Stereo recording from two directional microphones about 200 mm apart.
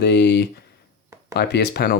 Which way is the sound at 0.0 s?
55° left (ahead or behind).